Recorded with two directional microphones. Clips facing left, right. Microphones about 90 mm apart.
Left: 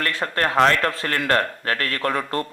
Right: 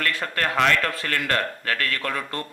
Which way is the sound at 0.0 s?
35° left (ahead or behind).